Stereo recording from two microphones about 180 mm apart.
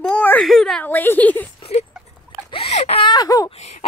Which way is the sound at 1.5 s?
35° left (ahead or behind).